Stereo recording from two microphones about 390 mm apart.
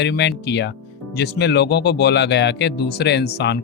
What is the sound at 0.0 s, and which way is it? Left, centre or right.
Speech, left.